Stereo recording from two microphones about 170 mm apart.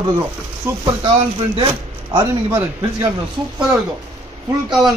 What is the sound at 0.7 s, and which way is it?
Speech, 15° right (ahead or behind).